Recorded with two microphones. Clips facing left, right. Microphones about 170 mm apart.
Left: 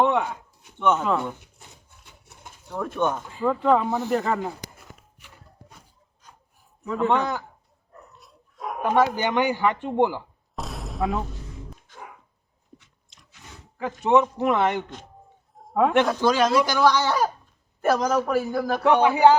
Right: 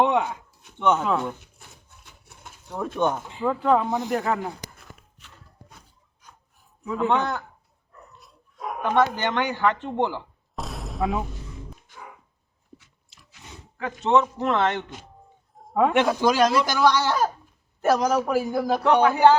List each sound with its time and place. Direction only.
0.0 s speech: 15° right (ahead or behind)
0.9 s speech: 5° right (ahead or behind)
2.6 s a man's voice: 10° right (ahead or behind)
3.4 s speech: centre (ahead or behind)
6.8 s a man's voice: 15° right (ahead or behind)
7.1 s speech: centre (ahead or behind)
10.5 s a sound: centre (ahead or behind)
14.0 s speech: 10° left (ahead or behind)
15.5 s a man's voice: centre (ahead or behind)
16.4 s a man's voice: 5° left (ahead or behind); by 18.8 s 15° right (ahead or behind)
19.0 s speech: 10° left (ahead or behind)